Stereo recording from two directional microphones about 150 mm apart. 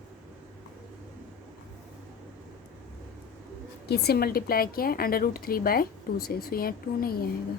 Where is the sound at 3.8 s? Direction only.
90° left.